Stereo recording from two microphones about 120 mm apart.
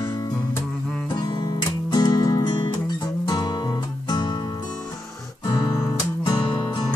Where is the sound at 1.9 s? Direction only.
35° left (ahead or behind).